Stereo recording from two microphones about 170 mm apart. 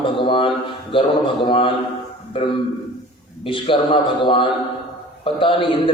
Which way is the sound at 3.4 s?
30° left (ahead or behind).